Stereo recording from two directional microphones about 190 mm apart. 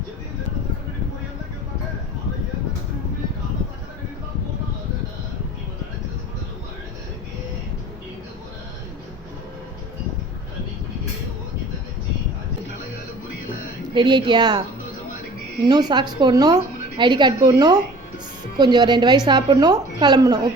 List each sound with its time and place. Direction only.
13.9 s a woman's voice: 25° right (ahead or behind)
15.6 s a woman's voice: 20° right (ahead or behind)